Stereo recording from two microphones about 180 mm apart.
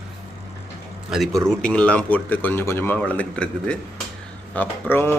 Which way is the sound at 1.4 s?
5° left (ahead or behind).